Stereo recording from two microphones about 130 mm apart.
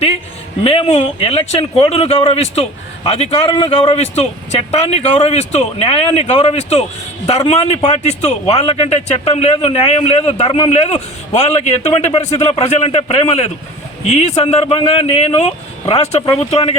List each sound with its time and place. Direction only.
0.6 s a man's voice: 50° left (ahead or behind)
10.4 s a man's voice: 45° left (ahead or behind)